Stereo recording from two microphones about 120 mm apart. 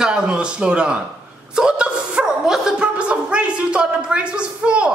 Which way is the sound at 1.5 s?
5° right (ahead or behind).